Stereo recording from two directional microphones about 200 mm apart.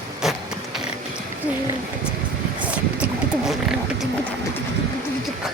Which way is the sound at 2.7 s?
5° right (ahead or behind).